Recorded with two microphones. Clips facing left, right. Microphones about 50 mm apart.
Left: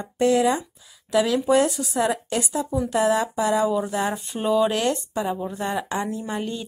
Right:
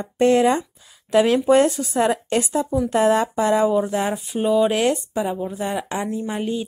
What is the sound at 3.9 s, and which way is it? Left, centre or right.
Speech, centre.